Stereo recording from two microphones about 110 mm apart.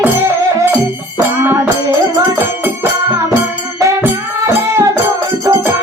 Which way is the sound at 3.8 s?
25° right (ahead or behind).